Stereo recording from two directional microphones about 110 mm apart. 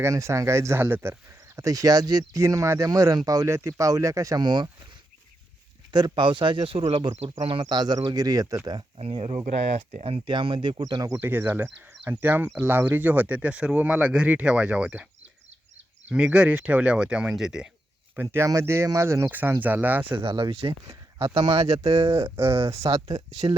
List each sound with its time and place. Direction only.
0.0 s speech: 25° right (ahead or behind)
1.5 s speech: 30° right (ahead or behind)
5.9 s speech: 45° right (ahead or behind)
9.0 s speech: 65° right (ahead or behind)
10.2 s speech: 50° right (ahead or behind)
11.1 s speech: 20° right (ahead or behind)
16.0 s speech: 10° right (ahead or behind)
18.2 s speech: 25° right (ahead or behind)
19.3 s speech: 15° right (ahead or behind)
20.1 s speech: 50° right (ahead or behind)
20.8 s speech: 30° right (ahead or behind)
21.8 s speech: 70° right (ahead or behind)
22.1 s speech: 25° right (ahead or behind)
23.4 s speech: 50° right (ahead or behind)